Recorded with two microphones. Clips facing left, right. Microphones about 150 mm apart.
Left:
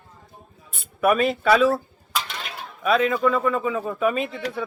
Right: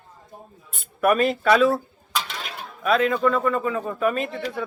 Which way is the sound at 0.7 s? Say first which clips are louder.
Even; centre (ahead or behind).